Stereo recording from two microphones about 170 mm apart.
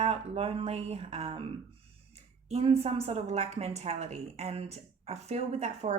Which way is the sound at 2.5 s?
35° right (ahead or behind).